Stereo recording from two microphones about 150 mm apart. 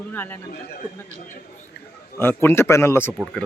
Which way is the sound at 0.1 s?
10° left (ahead or behind).